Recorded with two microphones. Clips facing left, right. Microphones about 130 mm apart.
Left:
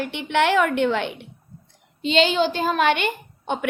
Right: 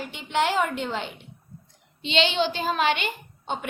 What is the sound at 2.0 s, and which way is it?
A woman's voice, 45° left (ahead or behind).